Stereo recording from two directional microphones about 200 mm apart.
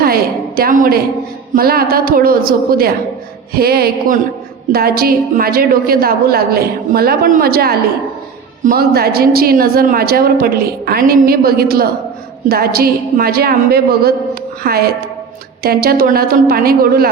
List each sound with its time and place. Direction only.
0.0 s a woman's voice: 50° right (ahead or behind)